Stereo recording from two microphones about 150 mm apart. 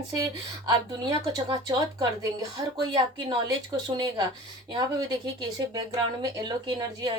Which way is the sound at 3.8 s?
30° right (ahead or behind).